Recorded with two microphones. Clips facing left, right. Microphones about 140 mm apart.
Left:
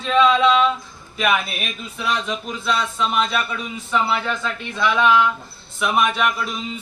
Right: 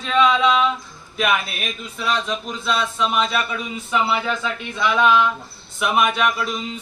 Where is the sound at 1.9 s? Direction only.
Centre (ahead or behind).